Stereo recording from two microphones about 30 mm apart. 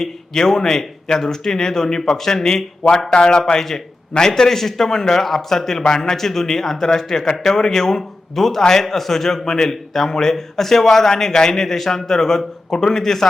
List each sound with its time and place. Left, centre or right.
0.0 s speech: centre
3.1 s a man's voice: left; by 13.2 s centre